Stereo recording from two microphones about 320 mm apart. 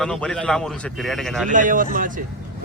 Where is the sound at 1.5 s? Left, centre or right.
Right.